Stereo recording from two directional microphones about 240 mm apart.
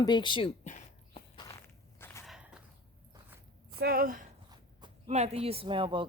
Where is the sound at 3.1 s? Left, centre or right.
Centre.